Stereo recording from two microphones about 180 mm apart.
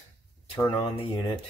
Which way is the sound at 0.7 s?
25° left (ahead or behind).